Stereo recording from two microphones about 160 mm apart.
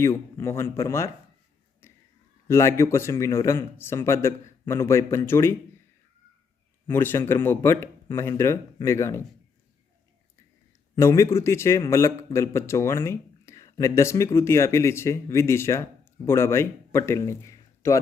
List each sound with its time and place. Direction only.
0.0 s speech: 15° left (ahead or behind)
2.5 s speech: 15° left (ahead or behind)
6.8 s speech: 15° left (ahead or behind)
10.9 s a man's voice: 20° left (ahead or behind)